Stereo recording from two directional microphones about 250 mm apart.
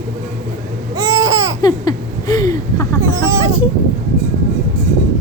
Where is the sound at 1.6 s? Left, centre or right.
Centre.